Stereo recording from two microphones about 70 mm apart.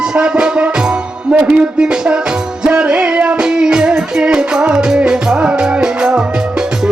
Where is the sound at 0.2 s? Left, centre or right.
Centre.